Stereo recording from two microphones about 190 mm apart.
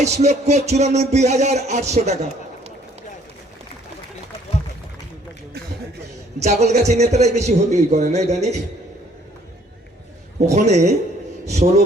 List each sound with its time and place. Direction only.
0.0 s music: 35° right (ahead or behind)
6.4 s music: 35° right (ahead or behind)
10.5 s music: 35° right (ahead or behind)